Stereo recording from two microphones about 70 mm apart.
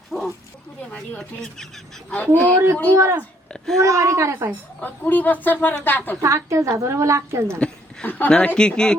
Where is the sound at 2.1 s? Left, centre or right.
Left.